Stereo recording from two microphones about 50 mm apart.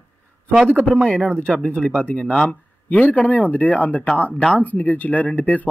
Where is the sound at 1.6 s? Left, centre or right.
Left.